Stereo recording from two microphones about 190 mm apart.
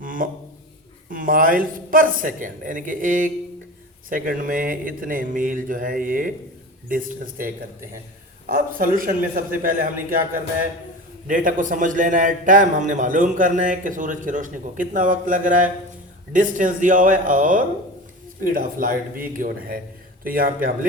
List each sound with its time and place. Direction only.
0.0 s a sound: 45° right (ahead or behind)
1.1 s a man's voice: 45° right (ahead or behind)
11.3 s a man's voice: 45° right (ahead or behind)